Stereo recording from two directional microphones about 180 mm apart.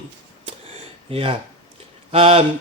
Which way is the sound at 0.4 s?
30° right (ahead or behind).